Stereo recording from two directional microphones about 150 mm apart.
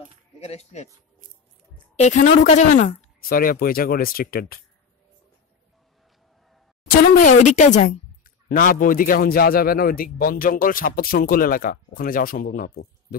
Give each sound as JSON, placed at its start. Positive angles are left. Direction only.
{"t": 0.4, "sound": "a woman's voice", "side_deg": 45}
{"t": 2.0, "sound": "a woman's voice", "side_deg": 50}
{"t": 3.2, "sound": "a woman's voice", "side_deg": 75}
{"t": 6.9, "sound": "a woman's voice", "side_deg": 60}